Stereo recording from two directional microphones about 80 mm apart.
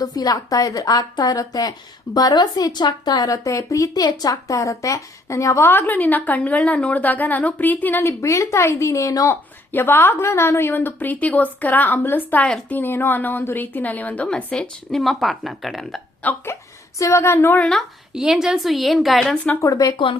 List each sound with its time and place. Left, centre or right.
0.0 s a woman's voice: left
8.2 s a woman's voice: left
9.3 s a woman's voice: left; by 16.0 s centre
16.2 s a woman's voice: left
18.1 s a woman's voice: centre
19.6 s a woman's voice: left